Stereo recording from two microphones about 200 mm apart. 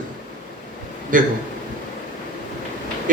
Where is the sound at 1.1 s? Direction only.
40° right (ahead or behind).